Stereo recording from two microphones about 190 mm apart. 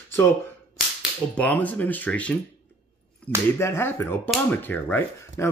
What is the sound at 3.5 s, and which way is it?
Speech, 15° left (ahead or behind).